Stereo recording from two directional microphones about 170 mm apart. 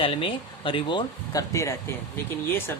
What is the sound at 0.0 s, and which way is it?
Speech, 30° left (ahead or behind).